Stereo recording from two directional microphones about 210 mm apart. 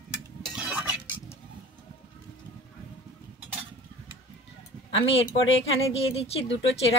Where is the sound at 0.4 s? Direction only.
5° right (ahead or behind).